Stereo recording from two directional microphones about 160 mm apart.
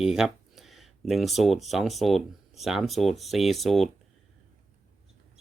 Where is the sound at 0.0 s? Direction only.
5° right (ahead or behind).